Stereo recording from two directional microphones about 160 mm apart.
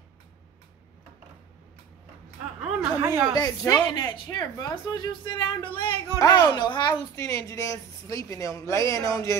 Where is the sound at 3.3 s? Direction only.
20° left (ahead or behind).